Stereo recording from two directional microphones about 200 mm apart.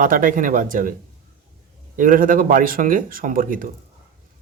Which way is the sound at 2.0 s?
45° right (ahead or behind).